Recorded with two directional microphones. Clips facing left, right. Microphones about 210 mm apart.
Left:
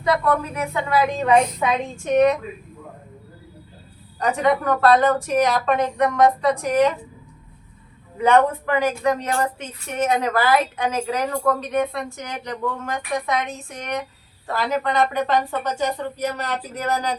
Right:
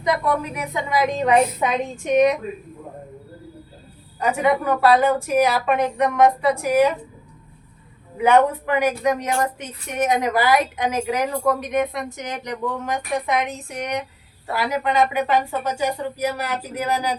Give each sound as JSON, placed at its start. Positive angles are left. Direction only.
{"t": 0.0, "sound": "a woman's voice", "side_deg": -15}
{"t": 4.3, "sound": "a woman's voice", "side_deg": -5}
{"t": 8.2, "sound": "a woman's voice", "side_deg": -10}